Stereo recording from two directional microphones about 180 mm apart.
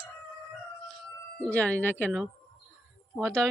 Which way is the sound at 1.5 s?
10° left (ahead or behind).